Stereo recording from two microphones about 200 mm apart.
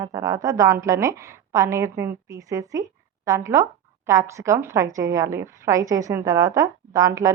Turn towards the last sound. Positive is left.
turn(degrees=-15)  # may be behind; listen again after turning